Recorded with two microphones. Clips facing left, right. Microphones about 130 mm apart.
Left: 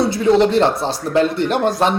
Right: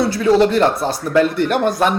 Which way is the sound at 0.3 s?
25° left (ahead or behind).